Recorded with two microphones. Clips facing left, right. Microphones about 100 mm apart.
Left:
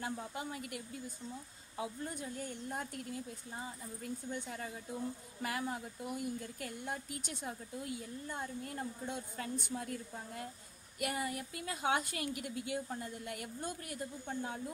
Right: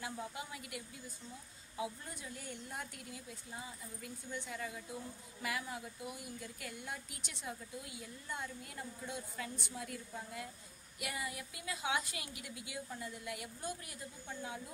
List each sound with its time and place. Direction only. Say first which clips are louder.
0.0 s a woman's voice: left 3 dB; 40° left (ahead or behind)
2.3 s a woman's voice: left 5 dB; 40° left (ahead or behind)